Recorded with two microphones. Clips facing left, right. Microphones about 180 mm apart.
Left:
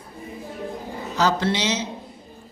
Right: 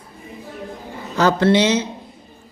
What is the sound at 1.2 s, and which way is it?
Speech, 55° right (ahead or behind).